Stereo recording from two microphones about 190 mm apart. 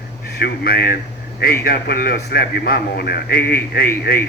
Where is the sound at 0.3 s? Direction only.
55° left (ahead or behind).